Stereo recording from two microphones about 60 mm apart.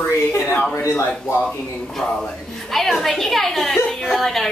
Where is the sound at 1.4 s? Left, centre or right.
Centre.